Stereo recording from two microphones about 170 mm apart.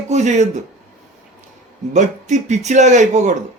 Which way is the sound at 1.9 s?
45° right (ahead or behind).